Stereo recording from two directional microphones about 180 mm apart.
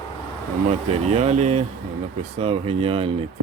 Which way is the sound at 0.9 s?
35° right (ahead or behind).